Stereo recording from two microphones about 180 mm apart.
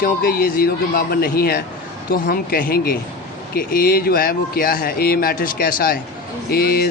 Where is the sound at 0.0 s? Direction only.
55° left (ahead or behind).